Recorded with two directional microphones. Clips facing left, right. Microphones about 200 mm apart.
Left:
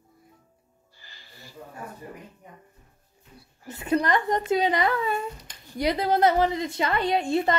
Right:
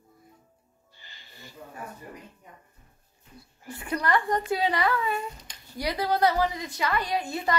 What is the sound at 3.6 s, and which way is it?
A woman's voice, 20° left (ahead or behind).